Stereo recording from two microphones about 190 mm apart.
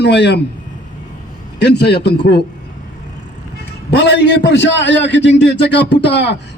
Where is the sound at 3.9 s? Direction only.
65° left (ahead or behind).